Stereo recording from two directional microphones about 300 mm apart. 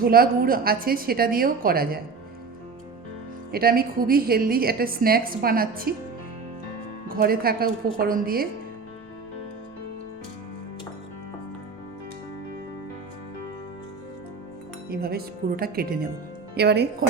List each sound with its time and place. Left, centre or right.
0.0 s a woman's voice: right
3.5 s a woman's voice: right
7.1 s a woman's voice: right
14.8 s speech: right